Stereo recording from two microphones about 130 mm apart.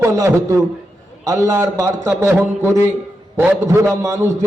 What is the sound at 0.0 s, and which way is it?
A man's voice, 20° right (ahead or behind).